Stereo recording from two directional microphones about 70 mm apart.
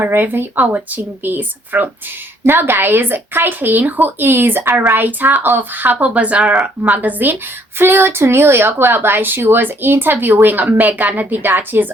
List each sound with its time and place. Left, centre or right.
0.0 s speech: right
6.4 s speech: centre
6.8 s speech: right